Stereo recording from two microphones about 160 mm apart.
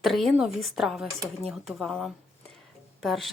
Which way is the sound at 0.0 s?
Centre (ahead or behind).